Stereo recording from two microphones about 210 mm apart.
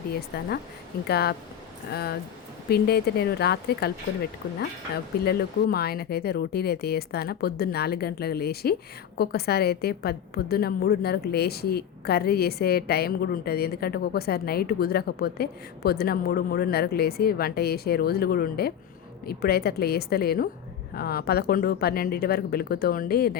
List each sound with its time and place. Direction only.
0.3 s a woman's voice: 50° left (ahead or behind)
5.2 s a woman's voice: 50° left (ahead or behind)